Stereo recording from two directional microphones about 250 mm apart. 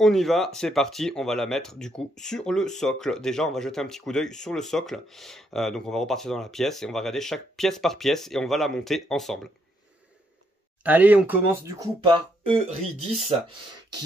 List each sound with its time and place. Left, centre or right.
0.0 s speech: centre
10.8 s speech: centre
12.0 s speech: right